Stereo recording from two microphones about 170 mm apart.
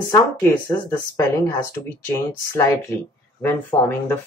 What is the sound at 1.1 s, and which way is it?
Speech, 20° left (ahead or behind).